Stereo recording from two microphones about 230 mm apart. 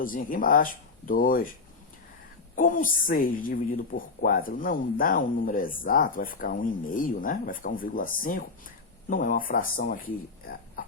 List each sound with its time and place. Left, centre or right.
0.0 s speech: left
2.6 s speech: left